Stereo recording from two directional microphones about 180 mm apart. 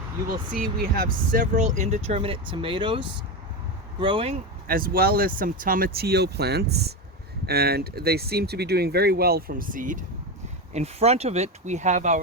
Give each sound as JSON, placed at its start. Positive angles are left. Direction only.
{"t": 0.5, "sound": "speech", "side_deg": -55}
{"t": 4.6, "sound": "speech", "side_deg": -55}
{"t": 10.8, "sound": "speech", "side_deg": -35}